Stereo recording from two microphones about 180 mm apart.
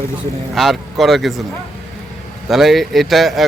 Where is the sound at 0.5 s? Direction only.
Centre (ahead or behind).